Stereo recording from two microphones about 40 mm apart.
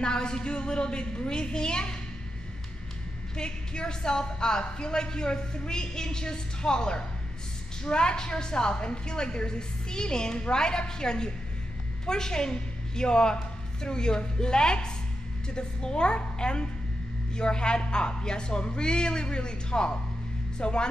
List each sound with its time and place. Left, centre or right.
0.0 s a woman's voice: left
3.3 s a woman's voice: left